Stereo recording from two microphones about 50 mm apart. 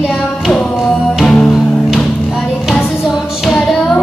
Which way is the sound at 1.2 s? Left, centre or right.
Centre.